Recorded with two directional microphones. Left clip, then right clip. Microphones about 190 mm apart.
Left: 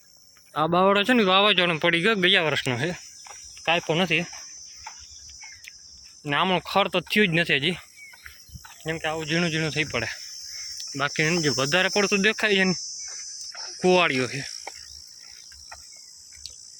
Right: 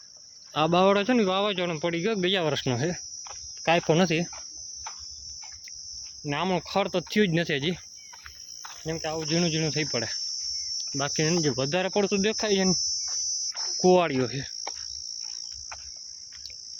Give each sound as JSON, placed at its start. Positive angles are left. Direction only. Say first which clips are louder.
{"t": 0.5, "sound": "speech", "louder": "left 1 dB", "side_deg": -5}
{"t": 2.3, "sound": "speech", "louder": "left 4 dB", "side_deg": -20}
{"t": 3.7, "sound": "speech", "louder": "even", "side_deg": -40}
{"t": 6.2, "sound": "cricket", "louder": "left 5 dB", "side_deg": 0}
{"t": 8.8, "sound": "speech", "louder": "left 3 dB", "side_deg": 5}
{"t": 9.4, "sound": "cricket", "louder": "left 2 dB", "side_deg": -15}
{"t": 10.8, "sound": "hum", "louder": "left 4 dB", "side_deg": -20}
{"t": 11.4, "sound": "cricket", "louder": "left 4 dB", "side_deg": -10}
{"t": 13.1, "sound": "insect", "louder": "right 8 dB", "side_deg": -5}
{"t": 13.5, "sound": "cricket", "louder": "right 5 dB", "side_deg": 10}
{"t": 13.8, "sound": "speech", "louder": "left 1 dB", "side_deg": -20}